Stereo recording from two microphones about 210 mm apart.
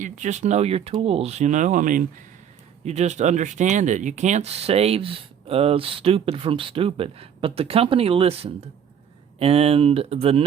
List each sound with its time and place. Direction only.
0.0 s speech: 35° right (ahead or behind)